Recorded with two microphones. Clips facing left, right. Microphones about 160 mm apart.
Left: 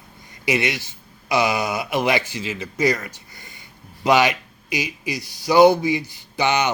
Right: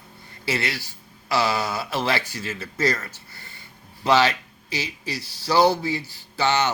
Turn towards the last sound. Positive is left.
turn(degrees=15)  # may be behind; listen again after turning